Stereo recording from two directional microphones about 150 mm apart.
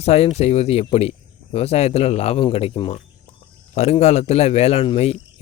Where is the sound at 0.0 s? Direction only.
45° left (ahead or behind).